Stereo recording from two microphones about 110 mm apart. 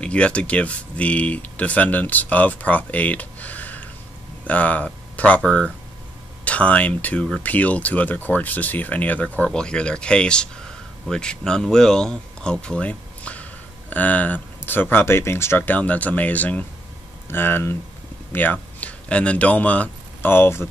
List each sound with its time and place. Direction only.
0.0 s speech: 10° left (ahead or behind)